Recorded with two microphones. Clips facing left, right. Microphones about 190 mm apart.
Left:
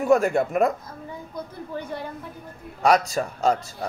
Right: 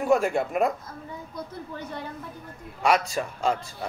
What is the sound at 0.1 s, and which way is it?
Speech, 45° left (ahead or behind).